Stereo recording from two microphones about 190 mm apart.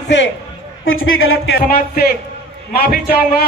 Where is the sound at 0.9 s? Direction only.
90° left.